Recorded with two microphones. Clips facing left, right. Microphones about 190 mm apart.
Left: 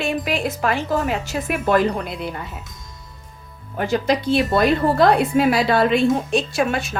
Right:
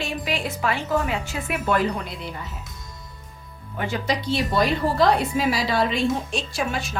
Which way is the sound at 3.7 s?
45° left (ahead or behind).